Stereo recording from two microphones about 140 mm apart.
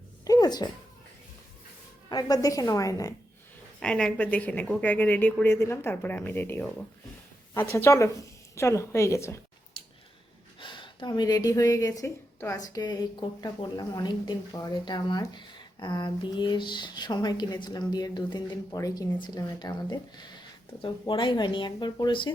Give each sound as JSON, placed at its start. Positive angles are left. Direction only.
{"t": 0.3, "sound": "a sound", "side_deg": 30}
{"t": 2.0, "sound": "a woman's voice", "side_deg": 30}
{"t": 3.8, "sound": "a woman's voice", "side_deg": 5}
{"t": 10.6, "sound": "speech", "side_deg": 35}